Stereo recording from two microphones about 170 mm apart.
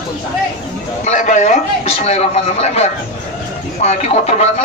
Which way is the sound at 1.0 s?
45° left (ahead or behind).